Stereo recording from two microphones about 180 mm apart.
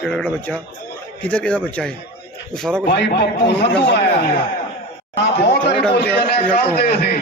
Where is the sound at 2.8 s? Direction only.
65° left (ahead or behind).